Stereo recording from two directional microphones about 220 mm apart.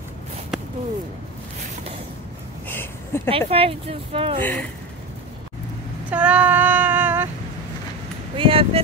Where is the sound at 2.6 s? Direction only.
10° left (ahead or behind).